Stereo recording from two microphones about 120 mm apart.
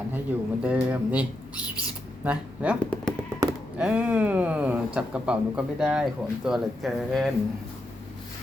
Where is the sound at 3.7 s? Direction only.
10° right (ahead or behind).